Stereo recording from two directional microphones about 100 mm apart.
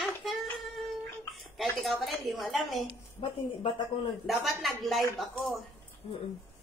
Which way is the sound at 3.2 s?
60° left (ahead or behind).